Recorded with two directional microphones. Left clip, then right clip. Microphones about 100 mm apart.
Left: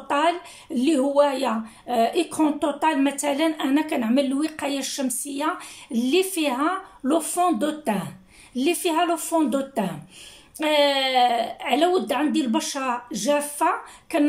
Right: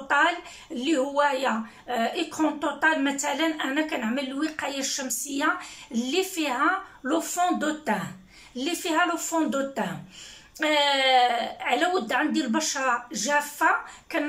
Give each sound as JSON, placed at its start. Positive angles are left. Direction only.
{"t": 0.7, "sound": "a woman's voice", "side_deg": 35}